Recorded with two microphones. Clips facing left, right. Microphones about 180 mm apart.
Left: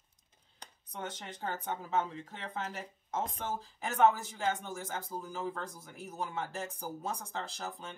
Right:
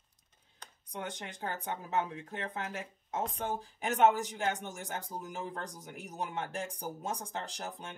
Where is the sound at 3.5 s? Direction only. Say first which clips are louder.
Right 3 dB; 15° right (ahead or behind).